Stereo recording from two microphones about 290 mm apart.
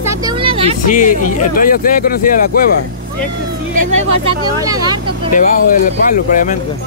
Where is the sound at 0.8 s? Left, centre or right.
Left.